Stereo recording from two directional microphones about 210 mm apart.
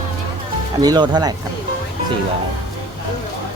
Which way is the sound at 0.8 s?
20° right (ahead or behind).